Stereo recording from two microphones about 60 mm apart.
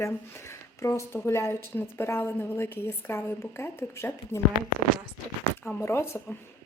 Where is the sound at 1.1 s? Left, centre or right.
Left.